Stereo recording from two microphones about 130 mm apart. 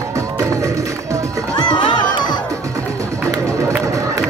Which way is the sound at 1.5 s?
35° left (ahead or behind).